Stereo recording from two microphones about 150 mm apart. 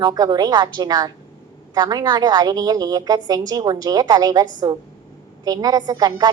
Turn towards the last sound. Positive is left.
turn(degrees=-25)  # may be behind; listen again after turning